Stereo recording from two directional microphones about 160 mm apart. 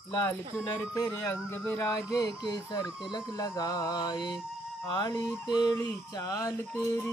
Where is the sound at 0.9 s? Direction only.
20° left (ahead or behind).